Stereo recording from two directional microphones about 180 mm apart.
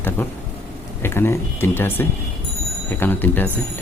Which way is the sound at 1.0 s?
15° left (ahead or behind).